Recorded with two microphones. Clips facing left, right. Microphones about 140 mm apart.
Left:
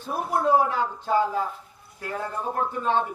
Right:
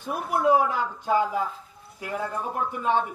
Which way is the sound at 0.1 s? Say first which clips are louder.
Even; 15° right (ahead or behind).